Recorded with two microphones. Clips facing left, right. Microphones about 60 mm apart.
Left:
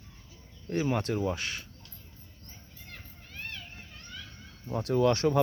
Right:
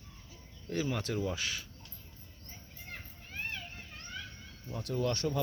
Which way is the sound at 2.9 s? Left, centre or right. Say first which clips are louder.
Right 2 dB; centre.